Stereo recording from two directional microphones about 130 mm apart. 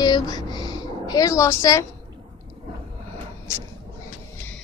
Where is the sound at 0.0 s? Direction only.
30° left (ahead or behind).